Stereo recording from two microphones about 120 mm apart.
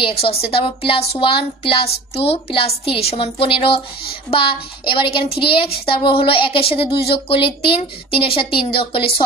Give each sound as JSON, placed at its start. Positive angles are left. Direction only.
{"t": 0.0, "sound": "a woman's voice", "side_deg": 55}